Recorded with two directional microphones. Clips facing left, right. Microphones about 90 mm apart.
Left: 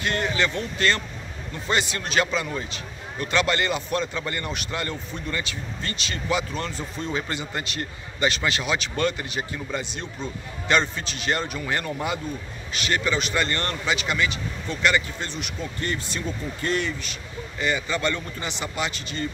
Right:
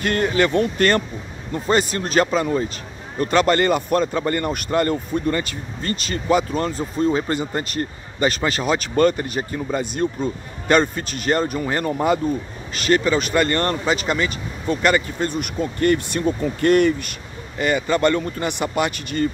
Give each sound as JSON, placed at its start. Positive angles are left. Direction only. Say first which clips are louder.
{"t": 0.0, "sound": "speech", "louder": "right 6 dB", "side_deg": -45}